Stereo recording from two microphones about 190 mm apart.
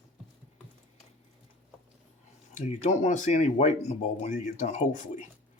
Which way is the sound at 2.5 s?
40° left (ahead or behind).